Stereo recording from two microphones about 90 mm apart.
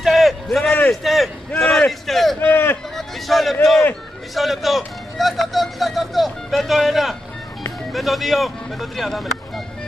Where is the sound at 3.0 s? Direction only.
Centre (ahead or behind).